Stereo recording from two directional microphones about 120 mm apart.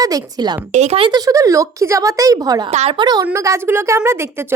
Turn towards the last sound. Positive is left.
turn(degrees=-20)  # may be behind; listen again after turning